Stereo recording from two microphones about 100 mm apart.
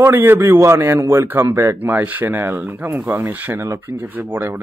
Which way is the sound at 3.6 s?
30° right (ahead or behind).